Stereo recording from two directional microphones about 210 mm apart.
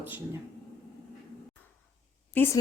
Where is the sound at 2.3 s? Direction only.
10° left (ahead or behind).